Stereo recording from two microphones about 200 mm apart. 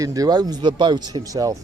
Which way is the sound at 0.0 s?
15° right (ahead or behind).